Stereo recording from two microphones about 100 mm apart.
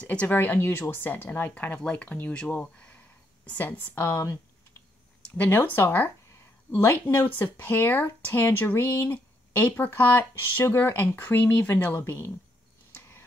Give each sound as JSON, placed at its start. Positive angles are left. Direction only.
{"t": 0.0, "sound": "speech", "side_deg": 15}